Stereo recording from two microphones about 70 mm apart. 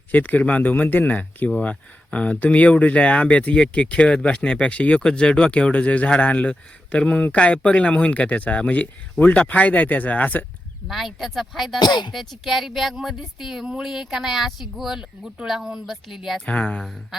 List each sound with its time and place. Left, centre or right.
0.1 s speech: left
10.8 s speech: centre
11.8 s speech: left
12.1 s speech: centre
16.5 s speech: centre